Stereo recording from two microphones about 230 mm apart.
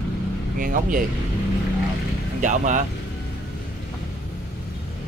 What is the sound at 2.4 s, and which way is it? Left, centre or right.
Speech, right.